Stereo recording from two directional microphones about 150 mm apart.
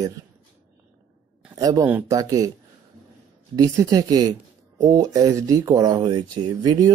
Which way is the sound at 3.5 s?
25° right (ahead or behind).